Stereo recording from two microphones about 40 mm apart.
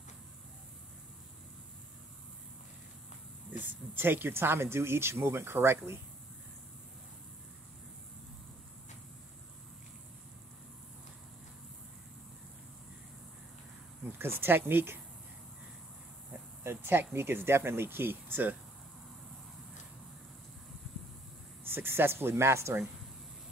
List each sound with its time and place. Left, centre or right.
3.6 s speech: right
14.1 s speech: right
16.6 s speech: right
21.6 s speech: right